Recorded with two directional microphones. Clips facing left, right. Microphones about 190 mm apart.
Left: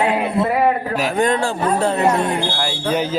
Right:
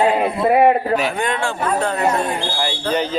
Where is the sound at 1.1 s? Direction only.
40° left (ahead or behind).